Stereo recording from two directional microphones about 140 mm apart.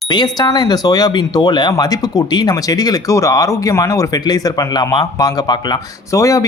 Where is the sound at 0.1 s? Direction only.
30° left (ahead or behind).